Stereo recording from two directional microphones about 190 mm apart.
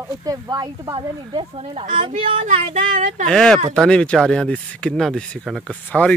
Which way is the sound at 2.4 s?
40° right (ahead or behind).